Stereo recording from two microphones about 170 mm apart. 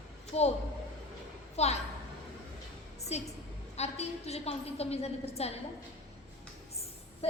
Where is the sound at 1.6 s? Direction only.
40° left (ahead or behind).